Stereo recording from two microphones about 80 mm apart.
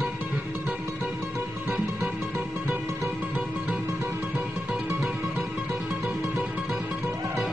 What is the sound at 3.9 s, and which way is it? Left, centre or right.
Music, right.